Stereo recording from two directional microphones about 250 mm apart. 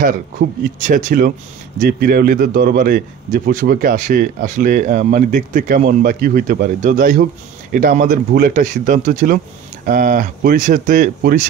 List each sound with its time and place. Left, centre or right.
0.0 s a man's voice: right